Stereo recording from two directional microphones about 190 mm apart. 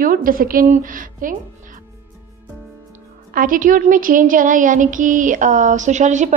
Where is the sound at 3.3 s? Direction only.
45° right (ahead or behind).